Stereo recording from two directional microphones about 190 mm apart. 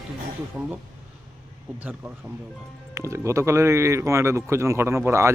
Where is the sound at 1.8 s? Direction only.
10° right (ahead or behind).